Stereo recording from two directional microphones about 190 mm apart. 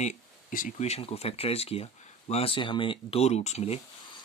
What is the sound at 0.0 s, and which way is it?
Speech, 40° left (ahead or behind).